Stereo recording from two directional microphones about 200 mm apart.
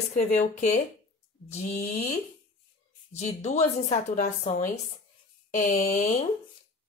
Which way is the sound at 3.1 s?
35° left (ahead or behind).